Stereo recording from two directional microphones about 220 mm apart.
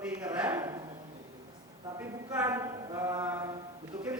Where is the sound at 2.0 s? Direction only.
10° right (ahead or behind).